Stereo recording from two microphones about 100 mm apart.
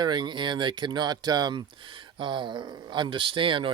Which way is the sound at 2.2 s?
55° right (ahead or behind).